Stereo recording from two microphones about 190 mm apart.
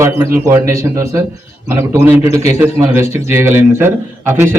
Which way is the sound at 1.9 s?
15° right (ahead or behind).